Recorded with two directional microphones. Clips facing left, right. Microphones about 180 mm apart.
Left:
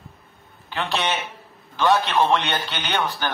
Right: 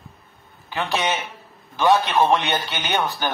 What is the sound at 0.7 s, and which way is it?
A man's voice, 15° right (ahead or behind).